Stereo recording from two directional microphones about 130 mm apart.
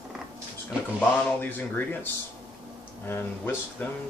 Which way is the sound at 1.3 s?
15° left (ahead or behind).